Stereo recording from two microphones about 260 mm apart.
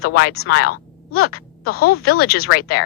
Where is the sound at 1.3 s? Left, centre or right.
Left.